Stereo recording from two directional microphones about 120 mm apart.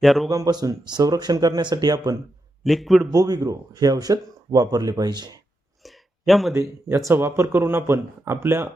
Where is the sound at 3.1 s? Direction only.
35° right (ahead or behind).